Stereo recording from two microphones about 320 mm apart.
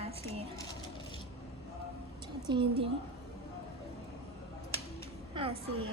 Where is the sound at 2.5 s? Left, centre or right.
Centre.